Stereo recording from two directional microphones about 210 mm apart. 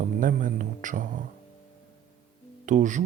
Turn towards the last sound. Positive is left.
turn(degrees=-35)  # may be behind; listen again after turning